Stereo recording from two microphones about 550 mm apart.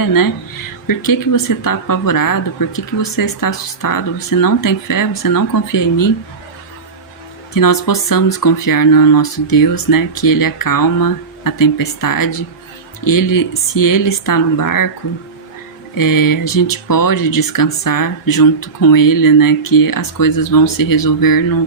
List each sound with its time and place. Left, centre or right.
0.0 s speech: left
7.5 s speech: left
16.0 s speech: left